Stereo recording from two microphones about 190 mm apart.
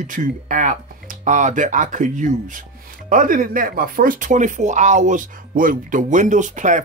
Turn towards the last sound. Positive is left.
turn(degrees=-40)  # may be behind; listen again after turning